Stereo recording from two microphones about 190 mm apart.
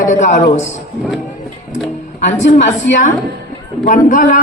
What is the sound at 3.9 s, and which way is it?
Speech, 45° left (ahead or behind).